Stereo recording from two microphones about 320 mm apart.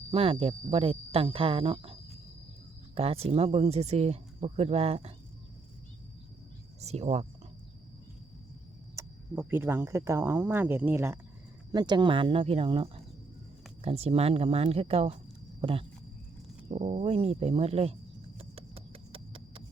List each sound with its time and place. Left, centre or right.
0.1 s speech: centre
6.7 s speech: centre
9.0 s speech: centre
18.3 s a sound: centre